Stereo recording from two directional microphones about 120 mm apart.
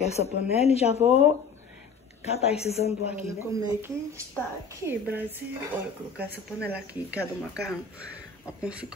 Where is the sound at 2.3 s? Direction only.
60° left (ahead or behind).